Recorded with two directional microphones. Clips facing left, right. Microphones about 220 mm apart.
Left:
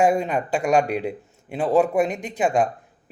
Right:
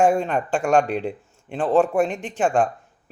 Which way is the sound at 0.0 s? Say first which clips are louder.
Right 1 dB; 5° left (ahead or behind).